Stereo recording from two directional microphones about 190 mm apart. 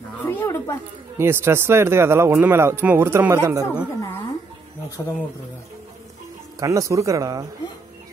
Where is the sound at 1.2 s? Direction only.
15° right (ahead or behind).